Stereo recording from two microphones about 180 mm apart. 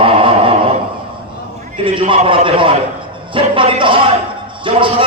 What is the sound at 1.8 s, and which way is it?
A man's voice, 30° right (ahead or behind).